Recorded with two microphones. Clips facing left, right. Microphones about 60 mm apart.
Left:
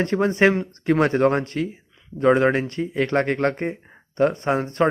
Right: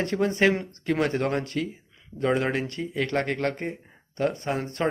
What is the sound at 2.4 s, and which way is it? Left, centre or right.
Speech, left.